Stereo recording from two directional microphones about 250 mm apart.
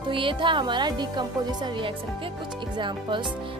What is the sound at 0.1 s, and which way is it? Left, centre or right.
Speech, centre.